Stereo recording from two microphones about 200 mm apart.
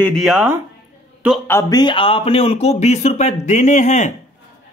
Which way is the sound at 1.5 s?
15° left (ahead or behind).